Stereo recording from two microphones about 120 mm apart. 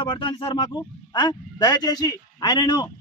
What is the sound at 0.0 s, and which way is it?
Speech, 40° left (ahead or behind).